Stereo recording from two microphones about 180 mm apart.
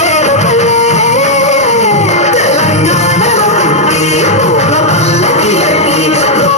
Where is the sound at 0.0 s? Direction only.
40° left (ahead or behind).